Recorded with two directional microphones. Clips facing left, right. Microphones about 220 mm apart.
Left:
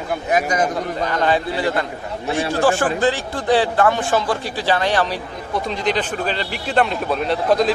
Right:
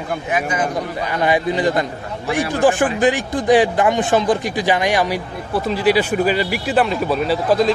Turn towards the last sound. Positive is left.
turn(degrees=0)  # may be behind; listen again after turning